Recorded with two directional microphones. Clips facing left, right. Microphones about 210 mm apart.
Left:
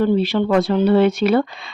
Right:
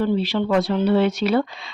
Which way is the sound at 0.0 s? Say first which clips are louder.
Left 4 dB; 55° left (ahead or behind).